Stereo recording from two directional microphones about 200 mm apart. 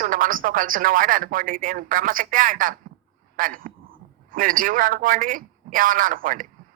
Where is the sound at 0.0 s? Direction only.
45° right (ahead or behind).